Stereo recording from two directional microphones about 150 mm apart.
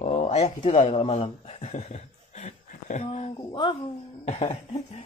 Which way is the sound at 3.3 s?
30° left (ahead or behind).